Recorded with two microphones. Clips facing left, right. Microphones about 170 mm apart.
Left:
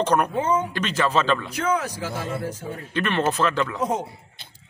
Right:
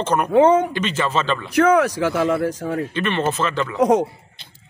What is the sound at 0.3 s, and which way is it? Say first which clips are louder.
Speech: right 9 dB; 75° right (ahead or behind).